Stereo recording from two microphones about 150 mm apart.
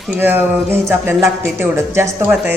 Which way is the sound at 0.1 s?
15° right (ahead or behind).